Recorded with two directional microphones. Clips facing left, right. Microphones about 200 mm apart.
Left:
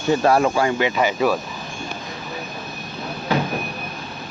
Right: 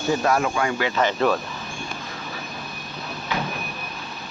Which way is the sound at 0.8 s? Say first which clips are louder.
Left 2 dB; 15° left (ahead or behind).